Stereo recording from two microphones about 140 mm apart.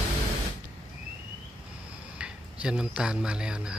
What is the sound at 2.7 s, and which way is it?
Speech, 5° right (ahead or behind).